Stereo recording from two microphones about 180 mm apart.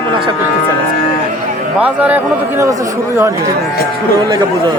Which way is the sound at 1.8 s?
10° right (ahead or behind).